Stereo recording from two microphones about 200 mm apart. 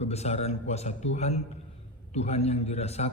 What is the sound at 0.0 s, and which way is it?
A man's voice, 30° left (ahead or behind).